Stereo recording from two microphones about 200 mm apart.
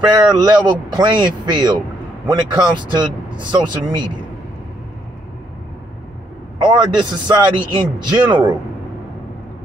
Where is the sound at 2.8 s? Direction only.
20° right (ahead or behind).